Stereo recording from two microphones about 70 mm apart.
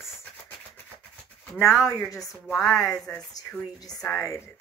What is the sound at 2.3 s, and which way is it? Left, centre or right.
Speech, centre.